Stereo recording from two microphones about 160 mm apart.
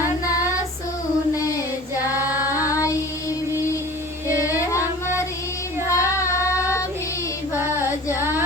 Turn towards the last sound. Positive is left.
turn(degrees=-15)  # may be behind; listen again after turning